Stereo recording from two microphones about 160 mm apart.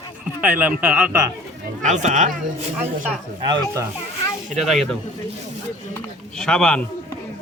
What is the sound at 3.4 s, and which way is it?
Speech, 30° right (ahead or behind).